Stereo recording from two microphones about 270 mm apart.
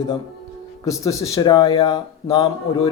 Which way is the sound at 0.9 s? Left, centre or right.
Centre.